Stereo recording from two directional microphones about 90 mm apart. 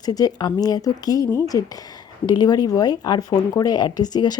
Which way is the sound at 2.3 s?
50° left (ahead or behind).